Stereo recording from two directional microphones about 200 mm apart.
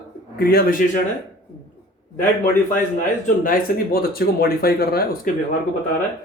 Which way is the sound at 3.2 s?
45° left (ahead or behind).